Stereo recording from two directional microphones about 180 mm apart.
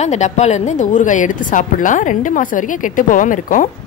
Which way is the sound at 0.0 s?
40° left (ahead or behind).